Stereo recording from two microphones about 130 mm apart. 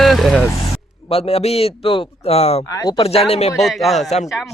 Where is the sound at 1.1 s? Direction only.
50° left (ahead or behind).